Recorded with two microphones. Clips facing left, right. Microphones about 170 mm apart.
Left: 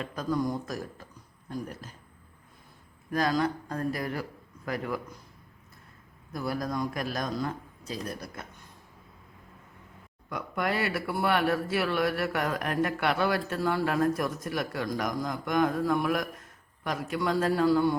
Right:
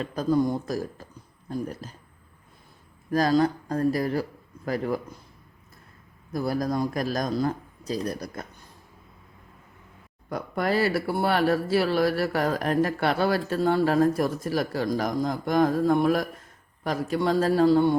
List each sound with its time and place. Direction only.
0.0 s speech: 30° right (ahead or behind)
3.1 s speech: 35° right (ahead or behind)
6.3 s speech: 35° right (ahead or behind)
10.2 s speech: 35° right (ahead or behind)